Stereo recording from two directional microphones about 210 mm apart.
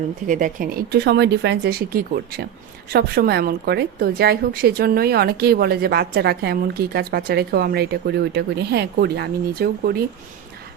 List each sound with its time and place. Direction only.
0.3 s a woman's voice: 40° right (ahead or behind)